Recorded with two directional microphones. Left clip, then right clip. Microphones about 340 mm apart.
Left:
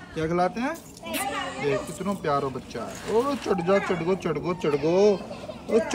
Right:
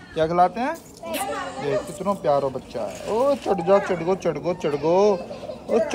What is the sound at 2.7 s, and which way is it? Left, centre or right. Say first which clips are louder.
A man's voice: right 1 dB; centre.